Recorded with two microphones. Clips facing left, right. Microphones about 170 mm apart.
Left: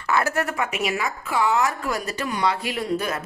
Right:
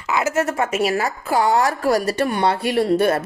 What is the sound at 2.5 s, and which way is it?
Speech, 30° right (ahead or behind).